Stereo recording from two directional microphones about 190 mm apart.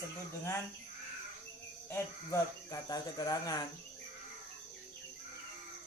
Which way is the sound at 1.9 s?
15° left (ahead or behind).